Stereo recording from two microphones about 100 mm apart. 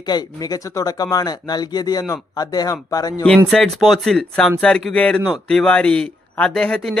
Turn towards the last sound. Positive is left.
turn(degrees=10)  # may be behind; listen again after turning